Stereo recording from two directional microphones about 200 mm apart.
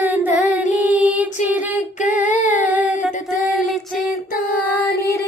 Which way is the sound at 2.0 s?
5° right (ahead or behind).